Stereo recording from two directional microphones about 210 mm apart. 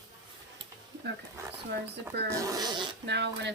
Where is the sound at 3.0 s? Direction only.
55° right (ahead or behind).